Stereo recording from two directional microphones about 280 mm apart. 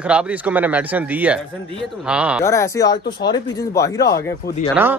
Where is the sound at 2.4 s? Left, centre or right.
Centre.